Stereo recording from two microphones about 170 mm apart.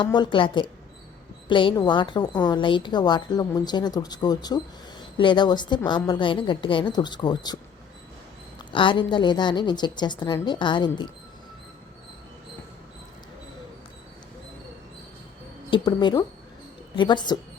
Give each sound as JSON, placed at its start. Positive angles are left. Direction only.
{"t": 0.0, "sound": "a woman's voice", "side_deg": 25}
{"t": 15.7, "sound": "a woman's voice", "side_deg": 25}